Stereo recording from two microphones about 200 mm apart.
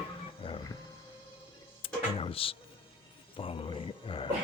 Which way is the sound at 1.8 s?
30° left (ahead or behind).